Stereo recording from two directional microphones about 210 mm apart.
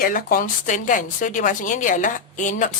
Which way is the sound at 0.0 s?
45° left (ahead or behind).